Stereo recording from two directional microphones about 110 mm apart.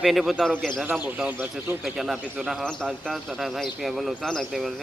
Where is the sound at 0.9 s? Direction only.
5° right (ahead or behind).